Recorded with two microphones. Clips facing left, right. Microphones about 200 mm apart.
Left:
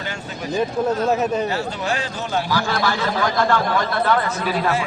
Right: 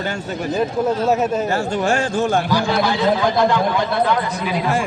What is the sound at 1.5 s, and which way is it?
Speech, 45° right (ahead or behind).